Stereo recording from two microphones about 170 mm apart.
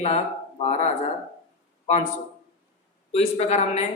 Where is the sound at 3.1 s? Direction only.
40° left (ahead or behind).